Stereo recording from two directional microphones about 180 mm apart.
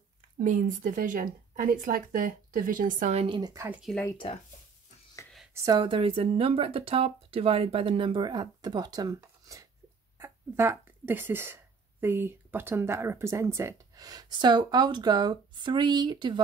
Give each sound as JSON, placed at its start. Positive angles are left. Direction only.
{"t": 0.4, "sound": "speech", "side_deg": -50}
{"t": 3.3, "sound": "speech", "side_deg": -25}
{"t": 5.5, "sound": "speech", "side_deg": -20}